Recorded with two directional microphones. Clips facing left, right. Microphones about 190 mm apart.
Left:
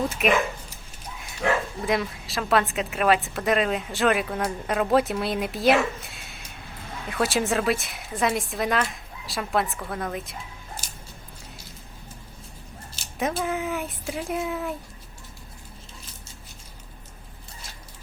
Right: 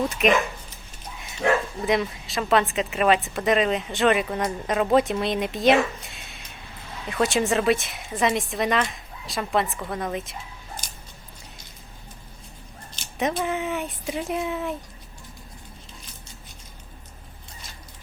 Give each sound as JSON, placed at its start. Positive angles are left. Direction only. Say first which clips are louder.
{"t": 0.2, "sound": "a woman's voice", "louder": "right 2 dB", "side_deg": 5}
{"t": 1.4, "sound": "bow-wow", "louder": "right 2 dB", "side_deg": -30}
{"t": 1.9, "sound": "a woman's voice", "louder": "right 2 dB", "side_deg": 0}
{"t": 12.9, "sound": "a woman's voice", "louder": "right 2 dB", "side_deg": 5}